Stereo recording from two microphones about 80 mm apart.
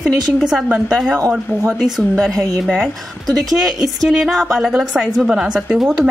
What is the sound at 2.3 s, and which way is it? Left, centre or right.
Speech, right.